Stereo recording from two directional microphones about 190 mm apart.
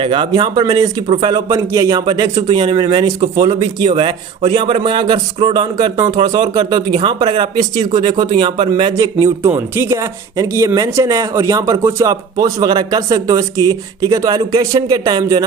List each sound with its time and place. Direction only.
0.0 s a man's voice: 25° right (ahead or behind)